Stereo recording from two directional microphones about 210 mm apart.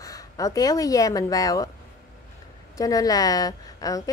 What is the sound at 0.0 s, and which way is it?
Speech, 15° left (ahead or behind).